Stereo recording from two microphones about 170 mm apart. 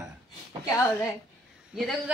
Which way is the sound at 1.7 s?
Centre (ahead or behind).